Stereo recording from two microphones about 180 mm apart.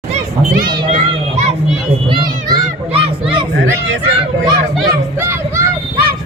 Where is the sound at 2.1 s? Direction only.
20° right (ahead or behind).